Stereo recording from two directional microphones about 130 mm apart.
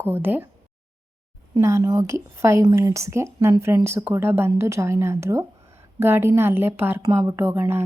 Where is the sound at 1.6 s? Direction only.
25° right (ahead or behind).